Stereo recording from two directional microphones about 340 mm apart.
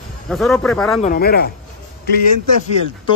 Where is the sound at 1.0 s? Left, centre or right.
Left.